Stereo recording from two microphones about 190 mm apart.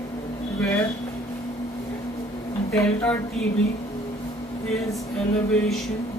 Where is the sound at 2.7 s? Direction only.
10° left (ahead or behind).